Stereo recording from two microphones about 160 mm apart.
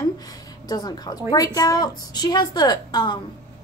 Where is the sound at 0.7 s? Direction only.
25° left (ahead or behind).